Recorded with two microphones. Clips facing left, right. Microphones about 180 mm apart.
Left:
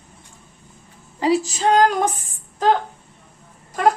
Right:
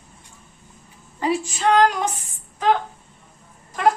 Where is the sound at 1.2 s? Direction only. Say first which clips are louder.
Left 3 dB; 35° left (ahead or behind).